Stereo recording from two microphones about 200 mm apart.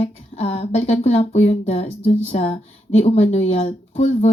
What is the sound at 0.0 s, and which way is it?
Speech, 30° left (ahead or behind).